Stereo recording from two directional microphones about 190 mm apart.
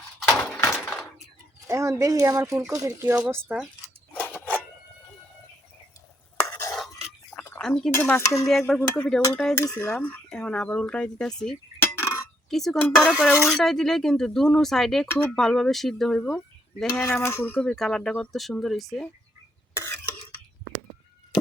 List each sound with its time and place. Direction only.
0.2 s a sound: 5° left (ahead or behind)
1.6 s speech: 15° right (ahead or behind)
4.1 s a sound: 10° left (ahead or behind)
6.4 s stir: 10° left (ahead or behind)
7.6 s dishes: 5° left (ahead or behind)
8.4 s speech: centre (ahead or behind)
16.9 s speech: 15° left (ahead or behind)
19.7 s cough: 15° left (ahead or behind)